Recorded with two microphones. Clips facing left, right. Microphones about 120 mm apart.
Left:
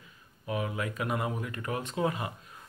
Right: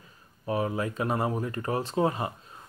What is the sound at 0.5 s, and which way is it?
Speech, 35° right (ahead or behind).